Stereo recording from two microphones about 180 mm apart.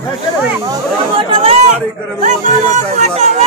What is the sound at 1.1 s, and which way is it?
Speech, 35° right (ahead or behind).